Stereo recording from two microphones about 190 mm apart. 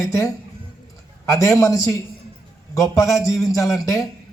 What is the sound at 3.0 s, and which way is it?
A man's voice, 15° left (ahead or behind).